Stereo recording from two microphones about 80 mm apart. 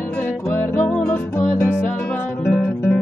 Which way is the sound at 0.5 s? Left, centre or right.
Centre.